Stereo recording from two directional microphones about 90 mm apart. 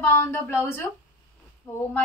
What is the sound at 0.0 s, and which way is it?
Speech, 25° left (ahead or behind).